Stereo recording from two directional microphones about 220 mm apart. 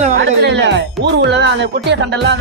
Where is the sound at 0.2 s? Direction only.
55° right (ahead or behind).